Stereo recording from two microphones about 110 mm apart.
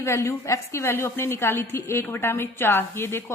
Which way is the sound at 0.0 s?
25° left (ahead or behind).